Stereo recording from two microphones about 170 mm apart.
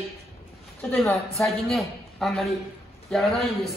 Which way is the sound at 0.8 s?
5° left (ahead or behind).